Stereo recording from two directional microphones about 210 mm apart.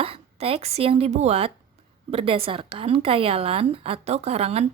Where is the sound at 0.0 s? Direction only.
30° right (ahead or behind).